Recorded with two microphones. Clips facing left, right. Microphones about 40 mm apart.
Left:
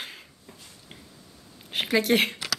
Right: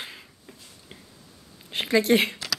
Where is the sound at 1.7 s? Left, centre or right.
Centre.